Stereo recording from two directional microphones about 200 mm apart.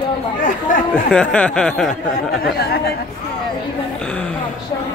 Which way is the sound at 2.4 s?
50° left (ahead or behind).